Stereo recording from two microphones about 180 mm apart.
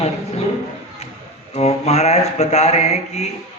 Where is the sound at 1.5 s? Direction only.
35° left (ahead or behind).